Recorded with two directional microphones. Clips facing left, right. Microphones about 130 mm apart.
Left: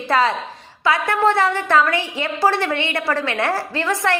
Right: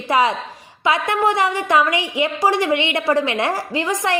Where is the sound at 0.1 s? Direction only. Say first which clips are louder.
Right 1 dB; 15° right (ahead or behind).